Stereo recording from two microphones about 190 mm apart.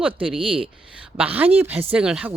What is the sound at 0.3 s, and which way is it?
Speech, 30° right (ahead or behind).